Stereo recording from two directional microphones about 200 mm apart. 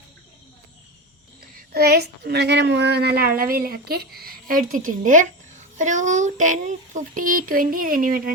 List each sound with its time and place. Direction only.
1.7 s a woman's voice: 50° right (ahead or behind)